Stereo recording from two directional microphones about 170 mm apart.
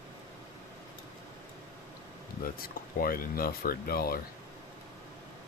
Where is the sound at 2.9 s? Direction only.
60° left (ahead or behind).